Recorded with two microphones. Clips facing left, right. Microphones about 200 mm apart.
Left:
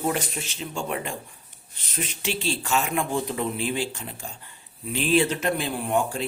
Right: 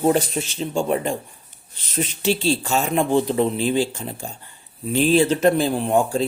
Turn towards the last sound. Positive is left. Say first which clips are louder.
# right 6 dB
turn(degrees=-30)  # may be behind; listen again after turning